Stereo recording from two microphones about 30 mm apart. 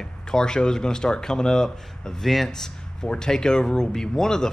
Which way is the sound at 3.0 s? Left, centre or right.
Left.